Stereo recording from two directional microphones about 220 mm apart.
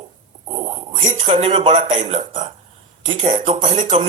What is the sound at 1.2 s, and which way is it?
Speech, 25° right (ahead or behind).